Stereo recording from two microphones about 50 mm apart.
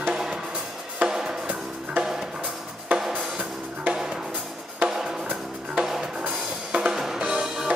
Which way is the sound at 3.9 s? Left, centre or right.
Centre.